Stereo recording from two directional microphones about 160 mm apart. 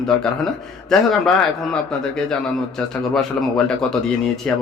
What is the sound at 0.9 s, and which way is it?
A man's voice, 5° left (ahead or behind).